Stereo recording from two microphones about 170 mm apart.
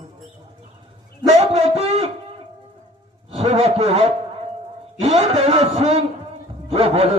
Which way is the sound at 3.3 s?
40° right (ahead or behind).